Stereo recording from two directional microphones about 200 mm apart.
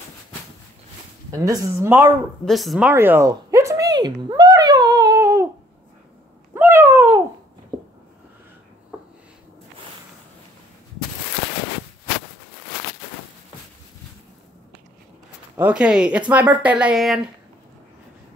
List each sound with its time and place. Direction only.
1.3 s speech: 15° right (ahead or behind)
2.4 s speech: centre (ahead or behind)
2.9 s a sound: 10° right (ahead or behind)
6.5 s cat: 15° right (ahead or behind)
15.5 s speech: 5° right (ahead or behind)